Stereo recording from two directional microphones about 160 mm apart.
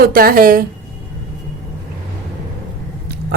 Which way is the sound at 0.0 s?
65° right (ahead or behind).